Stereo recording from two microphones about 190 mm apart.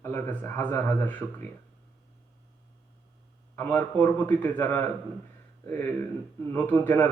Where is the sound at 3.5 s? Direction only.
10° left (ahead or behind).